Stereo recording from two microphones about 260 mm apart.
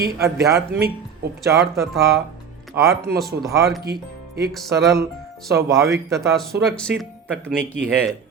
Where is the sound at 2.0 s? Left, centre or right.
Centre.